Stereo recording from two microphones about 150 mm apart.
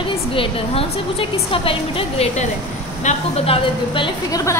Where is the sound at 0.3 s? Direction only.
40° left (ahead or behind).